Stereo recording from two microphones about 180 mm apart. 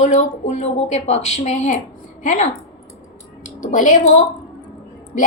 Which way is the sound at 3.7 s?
45° left (ahead or behind).